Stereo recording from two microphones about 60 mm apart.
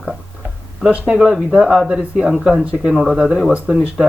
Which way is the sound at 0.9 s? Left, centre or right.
Centre.